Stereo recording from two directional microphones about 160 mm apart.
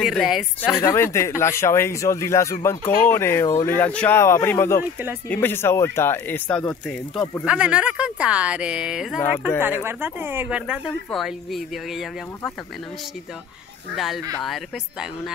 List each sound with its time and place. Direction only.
0.0 s speech: centre (ahead or behind)
0.7 s speech: 15° left (ahead or behind)
7.4 s speech: 5° right (ahead or behind)
13.9 s speech: centre (ahead or behind)